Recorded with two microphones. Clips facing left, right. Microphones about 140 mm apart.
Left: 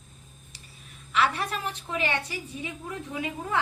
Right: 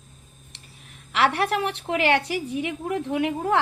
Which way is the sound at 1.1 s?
75° right (ahead or behind).